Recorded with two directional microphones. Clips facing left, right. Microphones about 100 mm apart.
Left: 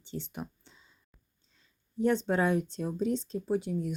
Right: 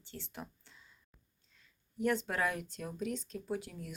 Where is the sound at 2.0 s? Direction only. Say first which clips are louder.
Left 6 dB; 25° left (ahead or behind).